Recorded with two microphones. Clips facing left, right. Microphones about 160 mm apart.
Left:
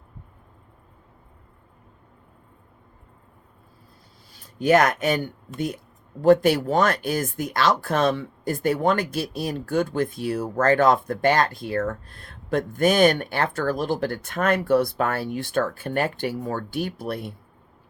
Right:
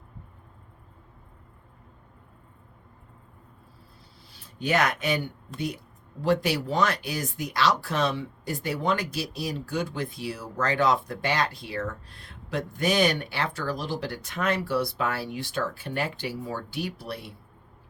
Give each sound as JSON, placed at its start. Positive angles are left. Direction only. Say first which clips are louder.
{"t": 4.3, "sound": "speech", "louder": "left 8 dB", "side_deg": 45}